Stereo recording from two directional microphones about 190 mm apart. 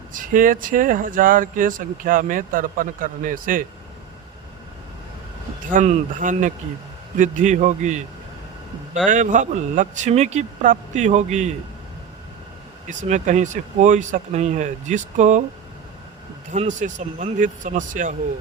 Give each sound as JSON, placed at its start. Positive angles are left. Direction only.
{"t": 0.1, "sound": "speech", "side_deg": -45}
{"t": 5.7, "sound": "speech", "side_deg": -40}
{"t": 9.0, "sound": "speech", "side_deg": -40}
{"t": 12.9, "sound": "speech", "side_deg": -40}
{"t": 16.5, "sound": "speech", "side_deg": -40}